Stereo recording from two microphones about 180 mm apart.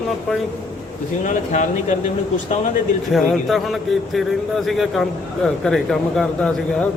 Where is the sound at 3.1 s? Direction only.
Centre (ahead or behind).